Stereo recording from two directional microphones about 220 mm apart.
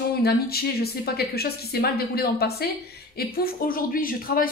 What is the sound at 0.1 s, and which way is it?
A woman's voice, 45° left (ahead or behind).